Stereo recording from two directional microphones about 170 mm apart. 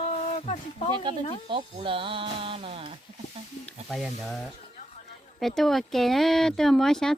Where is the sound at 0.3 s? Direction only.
40° left (ahead or behind).